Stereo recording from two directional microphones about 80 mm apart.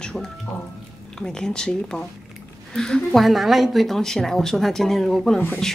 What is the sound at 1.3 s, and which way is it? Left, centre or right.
Speech, centre.